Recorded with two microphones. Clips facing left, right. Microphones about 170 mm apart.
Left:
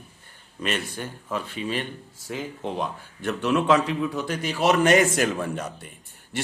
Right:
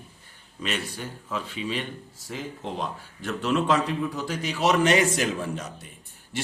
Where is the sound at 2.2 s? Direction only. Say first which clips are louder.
Left 3 dB; 60° left (ahead or behind).